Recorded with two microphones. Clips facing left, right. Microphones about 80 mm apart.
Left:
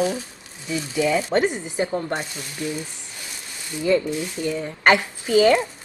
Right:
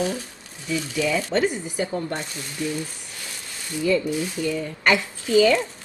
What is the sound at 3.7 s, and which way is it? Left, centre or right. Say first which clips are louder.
Speech: left 2 dB; left.